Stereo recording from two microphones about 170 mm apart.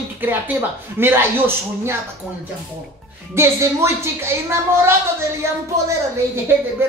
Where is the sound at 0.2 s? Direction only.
10° right (ahead or behind).